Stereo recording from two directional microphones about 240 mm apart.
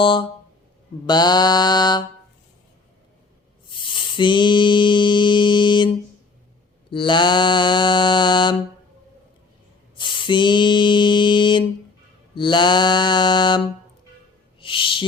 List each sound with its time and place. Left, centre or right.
0.0 s mantra: left
3.9 s mantra: centre
6.9 s mantra: centre
10.0 s mantra: centre
14.6 s owl: left